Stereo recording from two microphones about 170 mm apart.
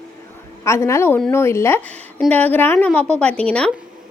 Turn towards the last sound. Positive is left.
turn(degrees=5)  # may be behind; listen again after turning